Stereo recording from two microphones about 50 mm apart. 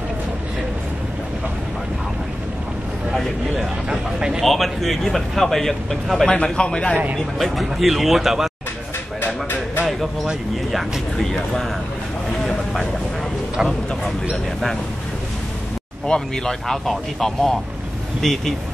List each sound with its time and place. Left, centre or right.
3.9 s a man's voice: centre
4.5 s speech: centre
6.3 s a man's voice: centre
7.4 s speech: centre
9.2 s a sound: left
10.7 s speech: centre
11.2 s speech: centre
14.3 s speech: centre
16.1 s speech: centre